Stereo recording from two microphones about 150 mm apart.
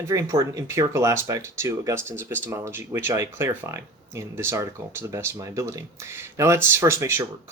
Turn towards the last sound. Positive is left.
turn(degrees=-20)  # may be behind; listen again after turning